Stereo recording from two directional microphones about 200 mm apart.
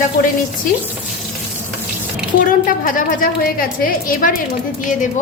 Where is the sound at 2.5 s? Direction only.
40° left (ahead or behind).